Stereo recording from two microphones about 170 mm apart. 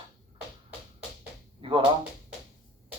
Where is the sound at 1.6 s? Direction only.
30° right (ahead or behind).